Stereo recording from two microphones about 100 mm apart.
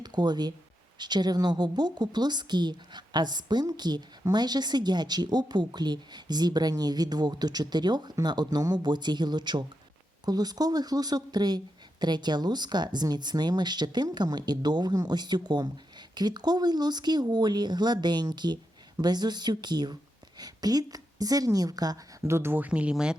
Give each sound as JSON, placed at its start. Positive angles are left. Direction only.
{"t": 0.0, "sound": "a woman's voice", "side_deg": -45}
{"t": 22.2, "sound": "speech", "side_deg": -25}